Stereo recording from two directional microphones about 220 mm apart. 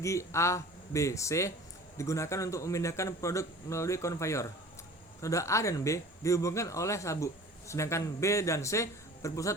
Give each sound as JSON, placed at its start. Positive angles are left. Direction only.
{"t": 0.0, "sound": "a man's voice", "side_deg": 15}